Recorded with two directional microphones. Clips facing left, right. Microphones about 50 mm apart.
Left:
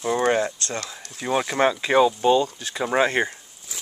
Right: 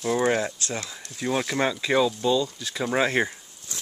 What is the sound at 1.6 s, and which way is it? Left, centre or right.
Speech, left.